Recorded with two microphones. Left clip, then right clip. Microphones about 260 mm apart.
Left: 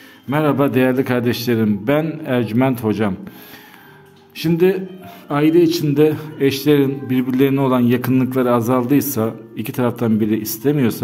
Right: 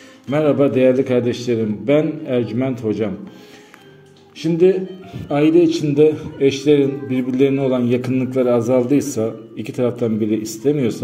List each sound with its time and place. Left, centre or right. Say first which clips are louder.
0.3 s a man's voice: right 1 dB; left
4.4 s a man's voice: right 1 dB; left